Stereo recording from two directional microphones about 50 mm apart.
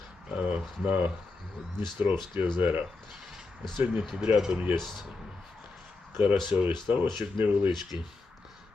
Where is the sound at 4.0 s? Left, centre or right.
Centre.